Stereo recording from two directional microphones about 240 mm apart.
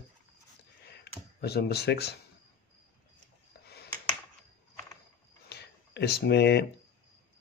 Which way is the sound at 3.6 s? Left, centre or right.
Left.